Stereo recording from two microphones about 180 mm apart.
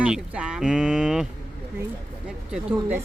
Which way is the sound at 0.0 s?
5° right (ahead or behind).